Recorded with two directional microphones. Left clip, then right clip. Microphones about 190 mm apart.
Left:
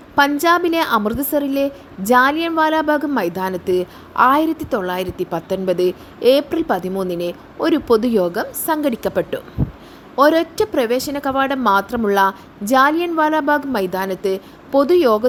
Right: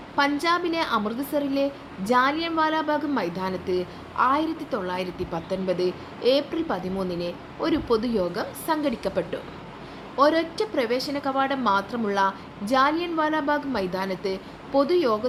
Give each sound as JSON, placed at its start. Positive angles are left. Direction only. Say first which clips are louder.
{"t": 0.2, "sound": "a woman's voice", "louder": "left 8 dB", "side_deg": 45}